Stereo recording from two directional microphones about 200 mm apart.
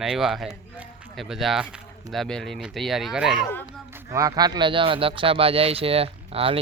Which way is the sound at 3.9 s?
15° right (ahead or behind).